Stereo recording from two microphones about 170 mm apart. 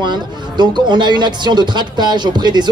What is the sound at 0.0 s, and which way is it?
Speech, 25° right (ahead or behind).